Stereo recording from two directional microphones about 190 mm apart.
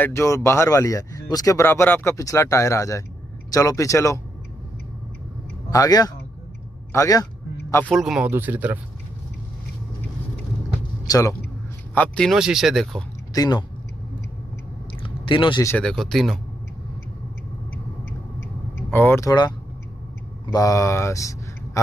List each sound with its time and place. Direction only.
0.0 s speech: 15° left (ahead or behind)
5.7 s a man's voice: 20° left (ahead or behind)
7.9 s speech: centre (ahead or behind)
11.1 s speech: 15° left (ahead or behind)
11.9 s speech: 5° left (ahead or behind)
13.3 s speech: 20° left (ahead or behind)
15.2 s speech: 25° left (ahead or behind)
15.6 s speech: 5° left (ahead or behind)
18.9 s speech: 10° left (ahead or behind)
20.5 s speech: 15° left (ahead or behind)